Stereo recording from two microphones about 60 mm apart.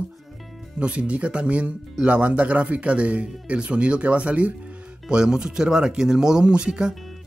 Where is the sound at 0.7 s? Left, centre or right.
Centre.